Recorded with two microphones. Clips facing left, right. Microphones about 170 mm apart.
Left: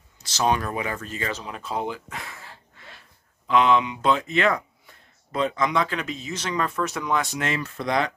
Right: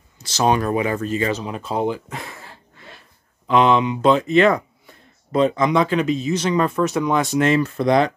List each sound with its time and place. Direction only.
0.7 s speech: 25° right (ahead or behind)
3.4 s speech: 30° right (ahead or behind)
7.3 s speech: 35° right (ahead or behind)